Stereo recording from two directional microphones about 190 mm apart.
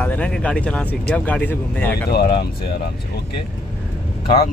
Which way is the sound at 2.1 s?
55° left (ahead or behind).